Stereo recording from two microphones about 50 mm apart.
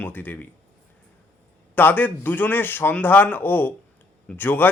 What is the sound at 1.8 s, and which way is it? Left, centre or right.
A man's voice, left.